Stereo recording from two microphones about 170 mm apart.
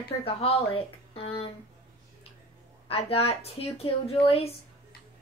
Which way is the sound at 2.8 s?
35° left (ahead or behind).